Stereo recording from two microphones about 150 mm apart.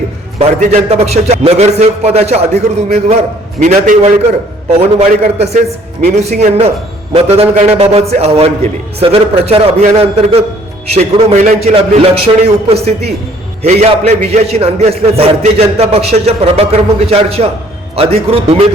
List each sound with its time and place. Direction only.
0.3 s a man's voice: 50° right (ahead or behind)
4.9 s a man's voice: 45° right (ahead or behind)